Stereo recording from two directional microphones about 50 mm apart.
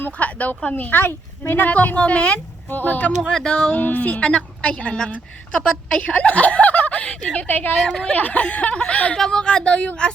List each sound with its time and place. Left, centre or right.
0.2 s speech: left
1.6 s speech: left
2.6 s speech: left
3.2 s speech: centre
3.7 s speech: left
4.2 s a woman's voice: centre
6.0 s a woman's voice: left
7.3 s speech: left
7.9 s speech: centre
8.1 s speech: left
9.1 s speech: centre